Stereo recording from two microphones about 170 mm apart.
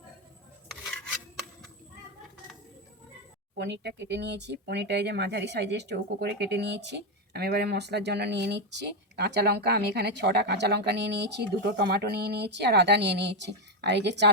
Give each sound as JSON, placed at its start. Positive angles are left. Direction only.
{"t": 3.5, "sound": "speech", "side_deg": -80}